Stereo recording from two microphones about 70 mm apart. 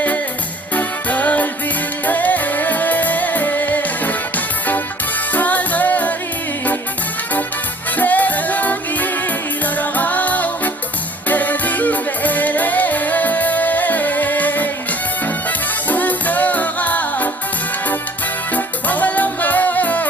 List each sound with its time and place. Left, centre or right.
0.7 s music: left
7.9 s music: left
18.5 s music: left